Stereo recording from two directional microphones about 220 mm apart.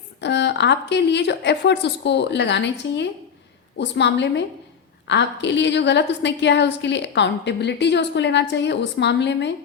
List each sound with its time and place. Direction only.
0.2 s a woman's voice: 50° left (ahead or behind)